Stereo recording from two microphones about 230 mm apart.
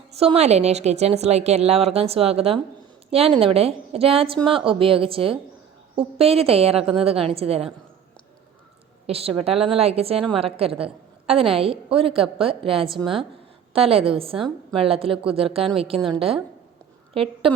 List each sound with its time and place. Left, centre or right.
0.2 s a woman's voice: right
9.0 s a woman's voice: right